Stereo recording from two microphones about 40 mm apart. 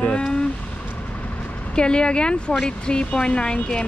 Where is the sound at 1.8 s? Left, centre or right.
Left.